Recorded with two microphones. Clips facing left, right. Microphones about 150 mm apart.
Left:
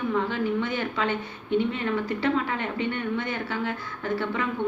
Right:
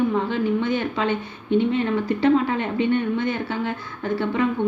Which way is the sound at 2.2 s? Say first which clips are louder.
Right 7 dB; 25° right (ahead or behind).